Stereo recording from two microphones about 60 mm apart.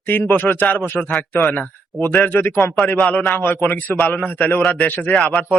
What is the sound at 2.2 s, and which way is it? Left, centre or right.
A man's voice, left.